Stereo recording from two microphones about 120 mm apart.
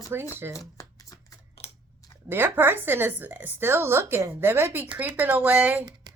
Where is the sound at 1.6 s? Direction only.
55° left (ahead or behind).